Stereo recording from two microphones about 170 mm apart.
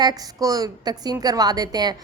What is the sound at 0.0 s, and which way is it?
A woman's voice, 20° right (ahead or behind).